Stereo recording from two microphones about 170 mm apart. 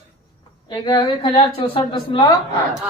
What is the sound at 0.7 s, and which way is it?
A woman's voice, 25° left (ahead or behind).